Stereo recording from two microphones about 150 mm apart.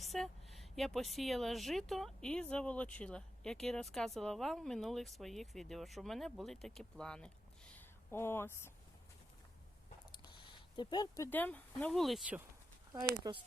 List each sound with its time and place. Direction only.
0.0 s speech: centre (ahead or behind); by 8.7 s 15° left (ahead or behind)
10.2 s a sound: 30° left (ahead or behind)
11.3 s speech: 10° left (ahead or behind)
13.1 s speech: 35° right (ahead or behind)